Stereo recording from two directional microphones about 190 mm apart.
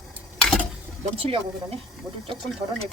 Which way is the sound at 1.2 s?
30° right (ahead or behind).